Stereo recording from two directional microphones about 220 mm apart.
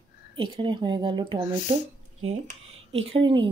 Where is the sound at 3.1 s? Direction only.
25° right (ahead or behind).